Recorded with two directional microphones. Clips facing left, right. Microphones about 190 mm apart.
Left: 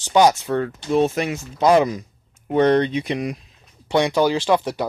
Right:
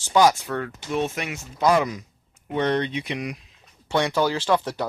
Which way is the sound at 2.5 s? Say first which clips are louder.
Left 7 dB; 40° left (ahead or behind).